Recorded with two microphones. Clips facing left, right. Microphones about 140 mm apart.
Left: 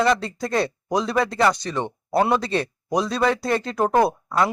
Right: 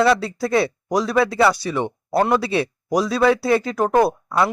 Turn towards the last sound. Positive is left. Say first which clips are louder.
# right 2 dB
turn(degrees=-5)  # may be behind; listen again after turning